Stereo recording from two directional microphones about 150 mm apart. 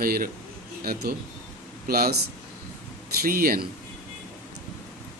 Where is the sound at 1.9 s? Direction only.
90° right.